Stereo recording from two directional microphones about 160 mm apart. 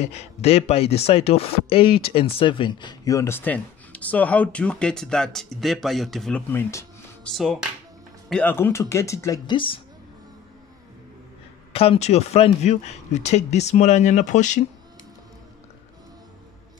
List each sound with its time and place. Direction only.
0.0 s speech: 40° left (ahead or behind); by 6.4 s centre (ahead or behind)
6.5 s speech: 15° left (ahead or behind)
7.3 s speech: 5° left (ahead or behind)
11.7 s speech: 35° left (ahead or behind)